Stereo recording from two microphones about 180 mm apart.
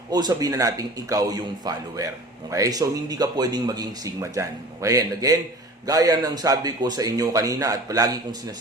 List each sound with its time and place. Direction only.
0.1 s a man's voice: 20° right (ahead or behind)